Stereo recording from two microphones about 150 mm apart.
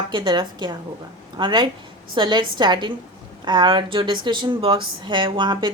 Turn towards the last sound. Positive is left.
turn(degrees=-30)  # may be behind; listen again after turning